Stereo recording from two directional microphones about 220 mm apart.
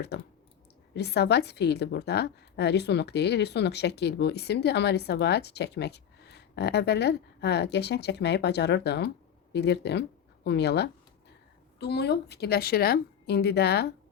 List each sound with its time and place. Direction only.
0.1 s a woman's voice: 50° left (ahead or behind)